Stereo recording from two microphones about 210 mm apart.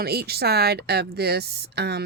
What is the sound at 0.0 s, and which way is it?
Speech, 50° right (ahead or behind).